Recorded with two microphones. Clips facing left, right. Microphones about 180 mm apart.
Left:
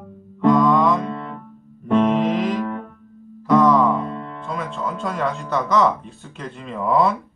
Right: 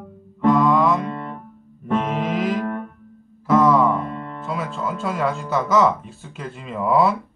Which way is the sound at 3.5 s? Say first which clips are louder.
Left 1 dB; centre (ahead or behind).